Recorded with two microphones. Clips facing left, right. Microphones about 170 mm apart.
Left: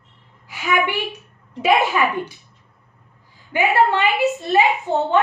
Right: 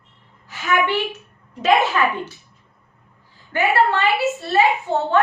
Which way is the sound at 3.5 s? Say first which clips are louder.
Left 1 dB; 15° left (ahead or behind).